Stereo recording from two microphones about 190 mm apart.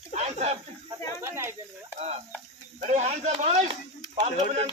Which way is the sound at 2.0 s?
35° right (ahead or behind).